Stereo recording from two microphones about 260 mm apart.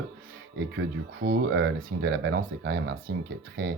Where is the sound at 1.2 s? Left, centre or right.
Right.